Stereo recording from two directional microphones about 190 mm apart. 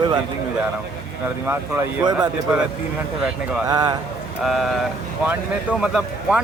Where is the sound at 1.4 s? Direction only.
10° right (ahead or behind).